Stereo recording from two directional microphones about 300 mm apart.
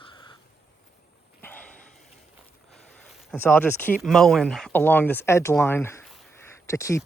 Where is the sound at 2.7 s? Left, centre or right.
Centre.